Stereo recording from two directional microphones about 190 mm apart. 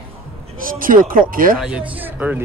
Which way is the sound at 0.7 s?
45° right (ahead or behind).